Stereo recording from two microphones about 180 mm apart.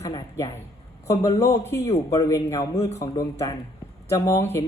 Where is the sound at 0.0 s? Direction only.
20° left (ahead or behind).